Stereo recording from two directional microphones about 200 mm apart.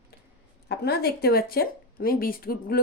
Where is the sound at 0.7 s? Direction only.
50° left (ahead or behind).